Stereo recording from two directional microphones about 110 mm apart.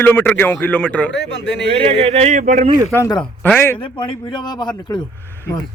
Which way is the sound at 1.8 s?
70° right (ahead or behind).